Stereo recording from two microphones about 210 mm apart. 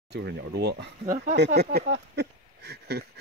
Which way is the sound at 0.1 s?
50° right (ahead or behind).